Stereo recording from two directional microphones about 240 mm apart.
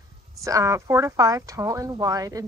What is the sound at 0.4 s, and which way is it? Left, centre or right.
Speech, centre.